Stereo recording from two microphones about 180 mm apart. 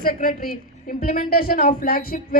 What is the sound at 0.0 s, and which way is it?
A woman's voice, 55° left (ahead or behind).